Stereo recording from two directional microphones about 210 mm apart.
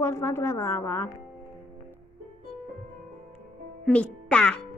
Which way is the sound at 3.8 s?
5° left (ahead or behind).